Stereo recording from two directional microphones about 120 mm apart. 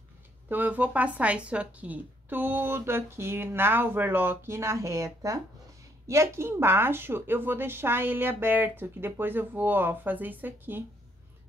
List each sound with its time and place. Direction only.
0.5 s speech: 15° right (ahead or behind)